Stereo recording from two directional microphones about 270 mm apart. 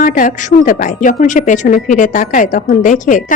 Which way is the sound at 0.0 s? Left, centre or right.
Left.